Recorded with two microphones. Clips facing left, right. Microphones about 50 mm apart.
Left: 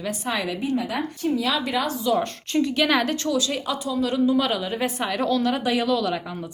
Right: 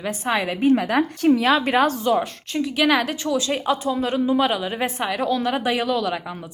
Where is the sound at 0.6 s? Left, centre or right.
Right.